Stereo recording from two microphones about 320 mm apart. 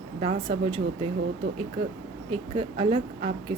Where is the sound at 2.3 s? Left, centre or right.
Centre.